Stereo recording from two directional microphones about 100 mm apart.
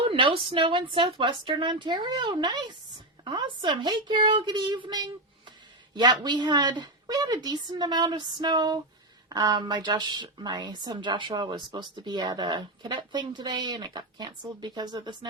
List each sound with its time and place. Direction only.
0.0 s speech: 60° right (ahead or behind); by 15.3 s 45° right (ahead or behind)